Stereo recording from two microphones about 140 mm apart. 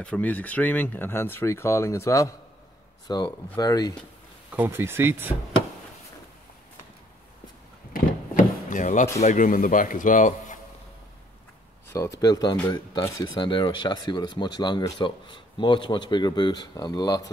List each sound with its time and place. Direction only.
0.0 s speech: 10° left (ahead or behind); by 3.9 s 25° left (ahead or behind)
4.5 s speech: 15° right (ahead or behind)
7.9 s a sound: 65° left (ahead or behind)
9.2 s speech: 65° left (ahead or behind)
11.9 s speech: 25° left (ahead or behind)